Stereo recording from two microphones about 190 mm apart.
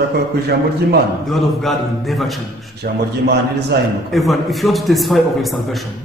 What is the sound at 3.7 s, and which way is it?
Speech, 60° right (ahead or behind).